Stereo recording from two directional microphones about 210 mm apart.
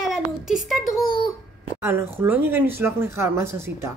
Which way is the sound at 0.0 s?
Centre (ahead or behind).